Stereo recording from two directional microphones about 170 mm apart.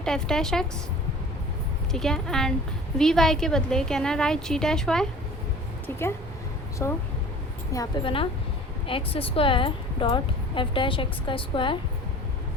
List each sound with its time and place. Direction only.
0.0 s a woman's voice: 5° left (ahead or behind)
1.9 s a woman's voice: centre (ahead or behind)
6.8 s speech: 10° left (ahead or behind)
8.0 s speech: 30° left (ahead or behind)